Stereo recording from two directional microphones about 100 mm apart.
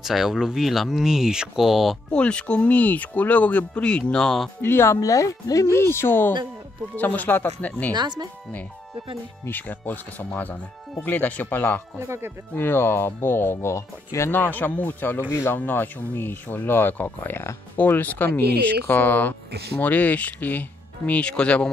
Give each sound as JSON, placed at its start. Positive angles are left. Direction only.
{"t": 0.0, "sound": "speech", "side_deg": -5}
{"t": 2.0, "sound": "speech", "side_deg": 10}
{"t": 4.6, "sound": "speech", "side_deg": 25}
{"t": 7.9, "sound": "speech", "side_deg": -45}
{"t": 9.4, "sound": "speech", "side_deg": 20}
{"t": 12.0, "sound": "speech", "side_deg": -25}
{"t": 12.5, "sound": "speech", "side_deg": 20}